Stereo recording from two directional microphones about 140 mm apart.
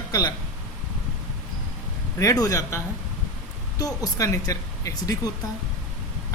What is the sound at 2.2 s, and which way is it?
Speech, 25° left (ahead or behind).